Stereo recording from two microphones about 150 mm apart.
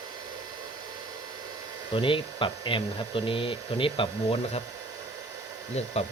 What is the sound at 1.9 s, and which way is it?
Speech, 35° left (ahead or behind).